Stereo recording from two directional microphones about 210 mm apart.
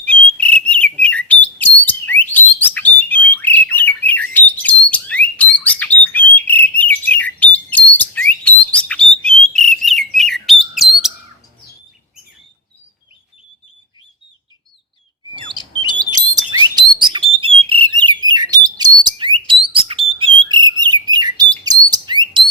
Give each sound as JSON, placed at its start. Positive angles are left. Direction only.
{"t": 0.0, "sound": "bird", "side_deg": 5}
{"t": 16.1, "sound": "bird", "side_deg": -20}